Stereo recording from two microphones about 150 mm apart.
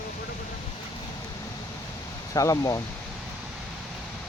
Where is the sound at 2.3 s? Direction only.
20° left (ahead or behind).